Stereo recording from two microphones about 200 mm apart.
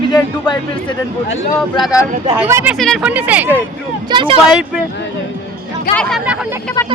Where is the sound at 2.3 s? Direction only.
10° right (ahead or behind).